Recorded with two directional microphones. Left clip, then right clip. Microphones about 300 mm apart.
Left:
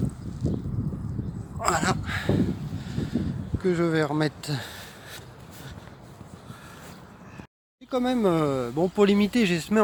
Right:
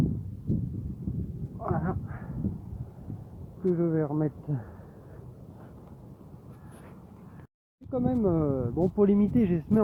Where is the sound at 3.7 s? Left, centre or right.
Centre.